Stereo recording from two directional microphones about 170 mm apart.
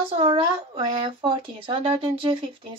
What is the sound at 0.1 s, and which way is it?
A woman's voice, 30° right (ahead or behind).